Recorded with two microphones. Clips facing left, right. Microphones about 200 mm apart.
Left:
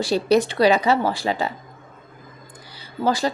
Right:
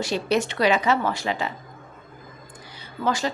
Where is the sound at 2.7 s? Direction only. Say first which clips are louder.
Left 4 dB; 35° left (ahead or behind).